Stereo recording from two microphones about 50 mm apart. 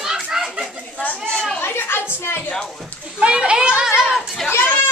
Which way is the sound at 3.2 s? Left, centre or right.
Centre.